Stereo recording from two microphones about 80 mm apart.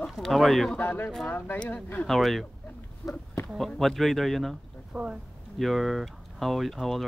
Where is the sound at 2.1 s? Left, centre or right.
Centre.